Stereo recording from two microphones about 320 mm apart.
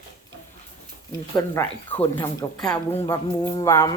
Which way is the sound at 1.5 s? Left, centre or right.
Centre.